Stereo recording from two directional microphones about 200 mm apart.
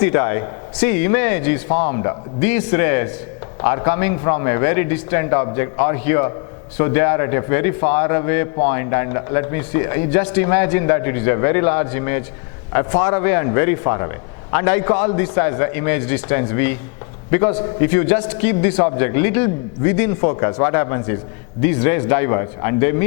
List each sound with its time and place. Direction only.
0.0 s a man's voice: 15° left (ahead or behind)